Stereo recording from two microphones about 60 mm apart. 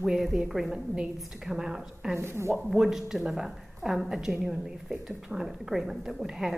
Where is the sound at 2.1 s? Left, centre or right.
Right.